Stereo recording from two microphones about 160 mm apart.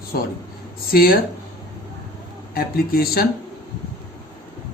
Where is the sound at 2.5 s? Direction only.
70° left (ahead or behind).